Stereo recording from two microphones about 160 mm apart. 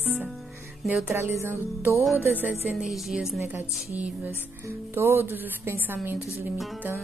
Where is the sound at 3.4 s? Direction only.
15° right (ahead or behind).